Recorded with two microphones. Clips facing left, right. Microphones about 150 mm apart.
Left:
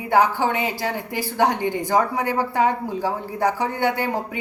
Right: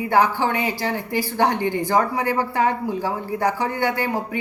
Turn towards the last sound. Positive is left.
turn(degrees=15)  # may be behind; listen again after turning